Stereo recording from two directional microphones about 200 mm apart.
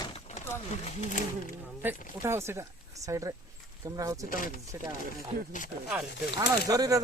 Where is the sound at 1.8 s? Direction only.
10° right (ahead or behind).